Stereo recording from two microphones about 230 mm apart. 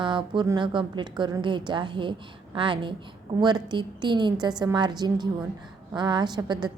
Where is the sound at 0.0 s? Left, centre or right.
Right.